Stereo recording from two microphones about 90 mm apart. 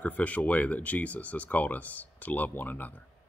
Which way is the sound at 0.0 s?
15° left (ahead or behind).